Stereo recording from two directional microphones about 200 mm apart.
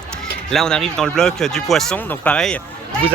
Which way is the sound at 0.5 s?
Centre (ahead or behind).